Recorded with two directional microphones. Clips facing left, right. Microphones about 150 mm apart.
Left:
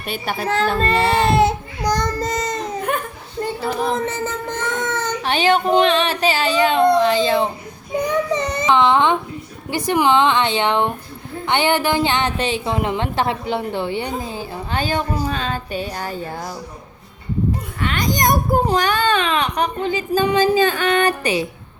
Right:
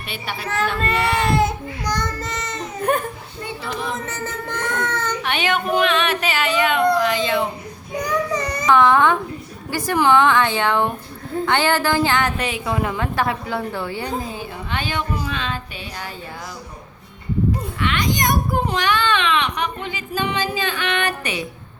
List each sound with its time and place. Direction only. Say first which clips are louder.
0.1 s speech: left 6 dB; 45° left (ahead or behind)
0.5 s speech: left 3 dB; 30° left (ahead or behind)
2.9 s a child's voice: right 4 dB; 40° right (ahead or behind)
3.4 s a child's voice: left 6 dB; 45° left (ahead or behind); by 5.1 s 20° left (ahead or behind)
5.2 s a child's voice: left 7 dB; 35° left (ahead or behind)
7.9 s child singing: left 3 dB; 25° left (ahead or behind)
9.6 s a woman's voice: left 1 dB; 20° left (ahead or behind)
14.3 s a child's voice: left 2 dB; 35° left (ahead or behind)
17.7 s a child's voice: left 3 dB; 40° left (ahead or behind)